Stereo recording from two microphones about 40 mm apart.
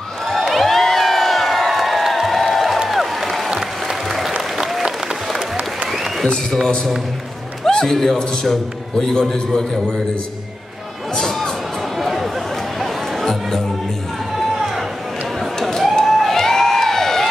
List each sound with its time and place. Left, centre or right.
0.2 s crowd: centre
2.9 s music: centre
3.4 s applause: centre
6.2 s a man's voice: centre
11.1 s music: centre
12.0 s a sound: centre
12.7 s music: centre
14.5 s a sound: centre